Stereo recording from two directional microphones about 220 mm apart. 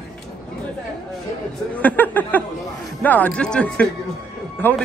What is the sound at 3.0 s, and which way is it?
Speech, 5° left (ahead or behind).